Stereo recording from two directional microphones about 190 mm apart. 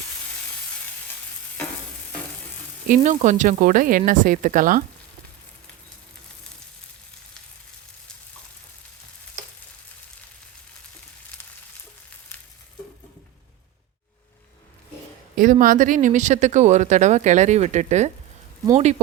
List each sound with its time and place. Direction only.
2.8 s speech: 40° right (ahead or behind)
15.4 s speech: 45° right (ahead or behind)